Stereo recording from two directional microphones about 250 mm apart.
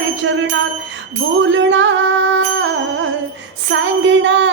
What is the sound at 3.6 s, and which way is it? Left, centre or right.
Music, right.